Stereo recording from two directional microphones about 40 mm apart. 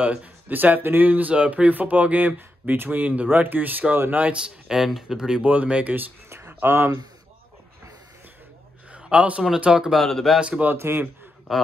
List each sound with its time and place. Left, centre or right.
0.0 s speech: right
0.5 s speech: right
4.1 s speech: right
4.4 s speech: centre
5.4 s speech: right
6.3 s a sound: right
8.9 s a sound: right
9.7 s speech: centre
10.0 s speech: centre
10.5 s speech: right
10.8 s speech: right
11.5 s speech: centre